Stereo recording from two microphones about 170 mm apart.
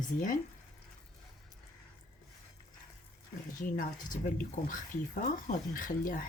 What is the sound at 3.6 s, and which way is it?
Speech, 55° left (ahead or behind).